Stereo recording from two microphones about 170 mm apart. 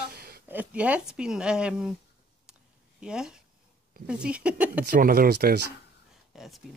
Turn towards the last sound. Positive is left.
turn(degrees=0)  # may be behind; listen again after turning